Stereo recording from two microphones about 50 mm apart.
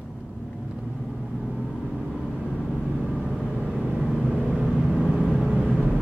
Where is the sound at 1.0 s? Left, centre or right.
Centre.